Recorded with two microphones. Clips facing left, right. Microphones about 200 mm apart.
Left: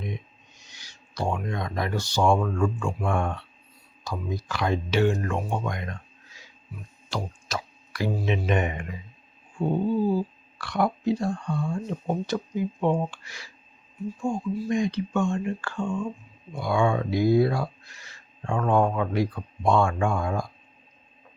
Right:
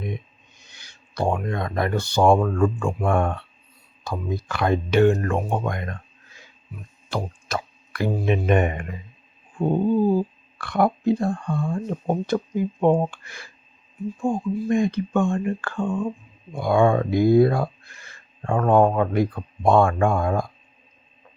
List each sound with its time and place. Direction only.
0.6 s speech: 55° right (ahead or behind)